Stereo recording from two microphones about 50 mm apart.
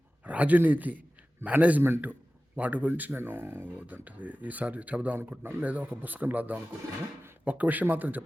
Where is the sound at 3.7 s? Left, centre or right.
Right.